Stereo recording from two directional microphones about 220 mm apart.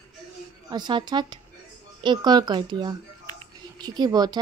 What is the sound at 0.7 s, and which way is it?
Speech, 20° right (ahead or behind).